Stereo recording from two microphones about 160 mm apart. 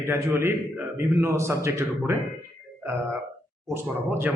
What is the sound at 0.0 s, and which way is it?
A man's voice, 15° right (ahead or behind).